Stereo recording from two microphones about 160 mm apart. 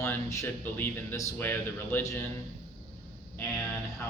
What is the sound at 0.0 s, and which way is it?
Speech, 15° left (ahead or behind).